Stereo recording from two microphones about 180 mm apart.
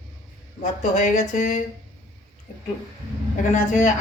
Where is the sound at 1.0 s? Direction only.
45° left (ahead or behind).